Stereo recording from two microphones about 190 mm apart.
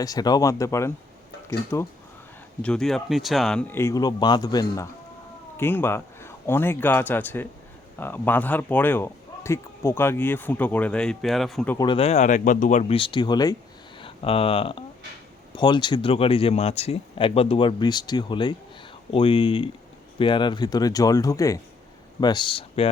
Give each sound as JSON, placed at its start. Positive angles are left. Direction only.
{"t": 0.0, "sound": "a man's voice", "side_deg": 20}
{"t": 11.8, "sound": "speech", "side_deg": 30}
{"t": 12.9, "sound": "speech", "side_deg": 25}